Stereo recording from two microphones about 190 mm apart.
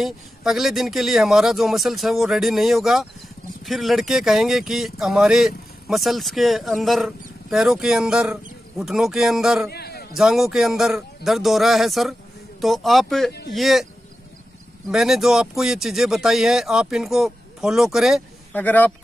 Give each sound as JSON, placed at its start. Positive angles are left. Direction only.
{"t": 0.0, "sound": "speech", "side_deg": 0}
{"t": 9.7, "sound": "a man's voice", "side_deg": 55}
{"t": 10.1, "sound": "speech", "side_deg": 0}
{"t": 14.9, "sound": "speech", "side_deg": 0}
{"t": 18.5, "sound": "speech", "side_deg": 10}